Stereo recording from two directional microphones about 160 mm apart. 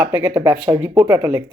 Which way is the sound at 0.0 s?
15° right (ahead or behind).